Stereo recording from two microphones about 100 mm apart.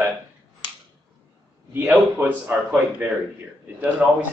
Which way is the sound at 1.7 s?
15° right (ahead or behind).